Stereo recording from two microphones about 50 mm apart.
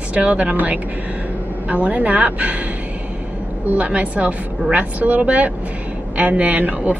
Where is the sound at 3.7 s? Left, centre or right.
Right.